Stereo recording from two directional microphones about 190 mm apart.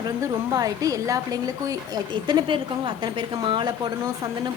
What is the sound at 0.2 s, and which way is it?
Speech, 20° right (ahead or behind).